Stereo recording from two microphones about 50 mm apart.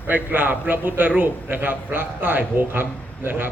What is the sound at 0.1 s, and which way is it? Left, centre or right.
A man's voice, right.